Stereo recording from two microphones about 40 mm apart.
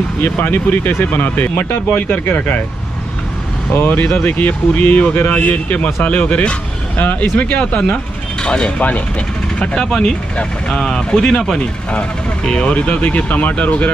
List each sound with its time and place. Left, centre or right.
0.2 s speech: left
3.7 s speech: left
4.3 s speech: left
9.8 s speech: centre; by 13.8 s left